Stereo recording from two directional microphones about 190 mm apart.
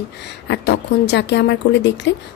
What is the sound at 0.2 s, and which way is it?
Speech, 65° left (ahead or behind).